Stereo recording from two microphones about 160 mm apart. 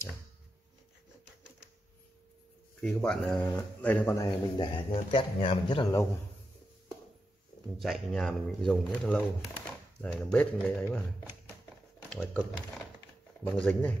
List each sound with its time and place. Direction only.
2.8 s speech: 5° left (ahead or behind)
4.6 s a man's voice: 30° left (ahead or behind)
7.8 s speech: centre (ahead or behind)
12.1 s speech: 5° left (ahead or behind)